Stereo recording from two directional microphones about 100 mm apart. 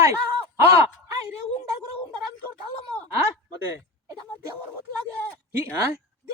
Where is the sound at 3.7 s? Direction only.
30° right (ahead or behind).